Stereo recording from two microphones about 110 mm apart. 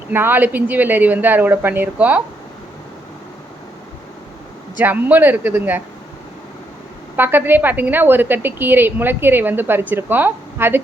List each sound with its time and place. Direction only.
0.1 s a woman's voice: 20° right (ahead or behind)
4.8 s a woman's voice: 15° right (ahead or behind)
7.2 s a woman's voice: 20° right (ahead or behind)